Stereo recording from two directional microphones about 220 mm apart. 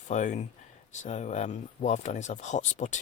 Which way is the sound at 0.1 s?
35° left (ahead or behind).